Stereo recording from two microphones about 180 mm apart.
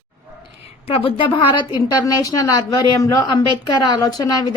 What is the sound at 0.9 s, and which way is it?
Speech, 30° left (ahead or behind).